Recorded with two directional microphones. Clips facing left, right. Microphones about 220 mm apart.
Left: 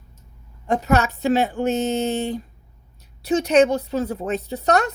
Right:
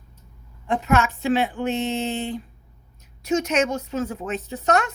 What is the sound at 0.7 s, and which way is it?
Speech, 40° left (ahead or behind).